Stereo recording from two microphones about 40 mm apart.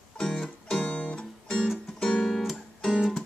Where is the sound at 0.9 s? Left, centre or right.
Left.